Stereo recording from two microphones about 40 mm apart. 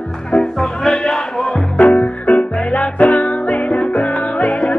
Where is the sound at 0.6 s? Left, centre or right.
Centre.